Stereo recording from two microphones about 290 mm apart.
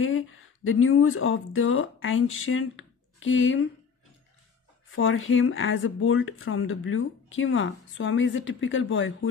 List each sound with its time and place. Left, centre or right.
0.7 s speech: left
4.9 s speech: left